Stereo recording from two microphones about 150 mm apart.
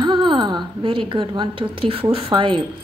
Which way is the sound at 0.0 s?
30° right (ahead or behind).